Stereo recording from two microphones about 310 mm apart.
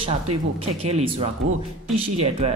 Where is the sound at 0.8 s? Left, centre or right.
Centre.